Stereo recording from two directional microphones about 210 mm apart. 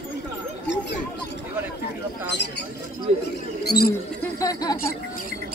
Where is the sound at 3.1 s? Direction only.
30° right (ahead or behind).